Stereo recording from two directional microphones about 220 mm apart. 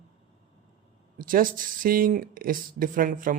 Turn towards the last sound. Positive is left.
turn(degrees=-40)  # may be behind; listen again after turning